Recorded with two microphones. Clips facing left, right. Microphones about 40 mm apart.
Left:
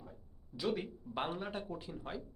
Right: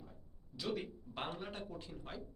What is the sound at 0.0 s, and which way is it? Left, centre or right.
Speech, centre.